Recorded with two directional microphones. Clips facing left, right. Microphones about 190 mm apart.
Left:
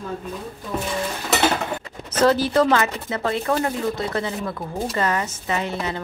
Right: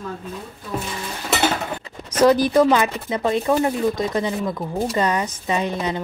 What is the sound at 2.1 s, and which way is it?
Speech, 15° right (ahead or behind).